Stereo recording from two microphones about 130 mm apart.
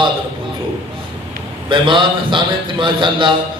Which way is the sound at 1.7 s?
40° right (ahead or behind).